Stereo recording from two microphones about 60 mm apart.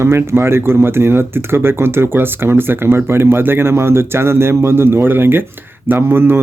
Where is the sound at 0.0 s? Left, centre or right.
Right.